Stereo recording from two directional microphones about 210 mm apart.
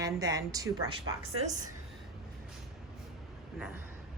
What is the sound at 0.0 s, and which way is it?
Speech, 15° right (ahead or behind).